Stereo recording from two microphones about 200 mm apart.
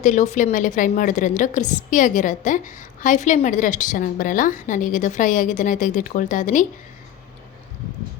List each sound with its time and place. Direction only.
0.0 s a woman's voice: 35° left (ahead or behind)